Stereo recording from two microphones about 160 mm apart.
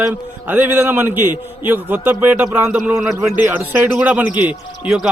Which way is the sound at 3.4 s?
10° right (ahead or behind).